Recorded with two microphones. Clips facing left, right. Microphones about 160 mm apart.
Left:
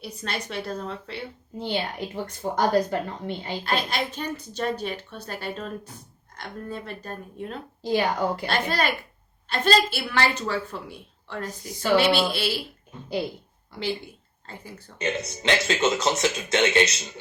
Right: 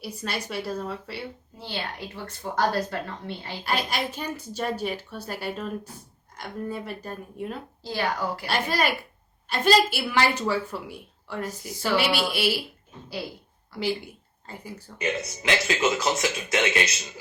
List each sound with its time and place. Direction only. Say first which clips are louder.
0.0 s a woman's voice: even; 10° right (ahead or behind)
1.5 s a woman's voice: left 7 dB; 20° left (ahead or behind)
3.7 s a woman's voice: even; 10° right (ahead or behind)
7.8 s speech: left 5 dB; 20° left (ahead or behind)
8.4 s a woman's voice: even; 10° right (ahead or behind)
13.7 s speech: right 2 dB; 20° left (ahead or behind)
14.9 s speech: left 2 dB; centre (ahead or behind)
15.4 s speech: left 2 dB; 30° left (ahead or behind)